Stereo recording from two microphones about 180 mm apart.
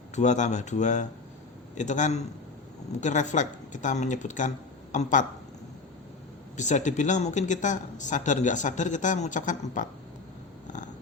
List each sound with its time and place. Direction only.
0.2 s speech: 40° left (ahead or behind)
6.6 s speech: 40° left (ahead or behind)